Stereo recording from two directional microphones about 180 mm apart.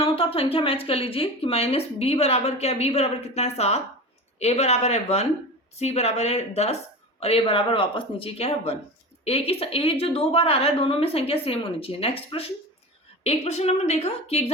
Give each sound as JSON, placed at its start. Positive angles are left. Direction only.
{"t": 0.0, "sound": "speech", "side_deg": 30}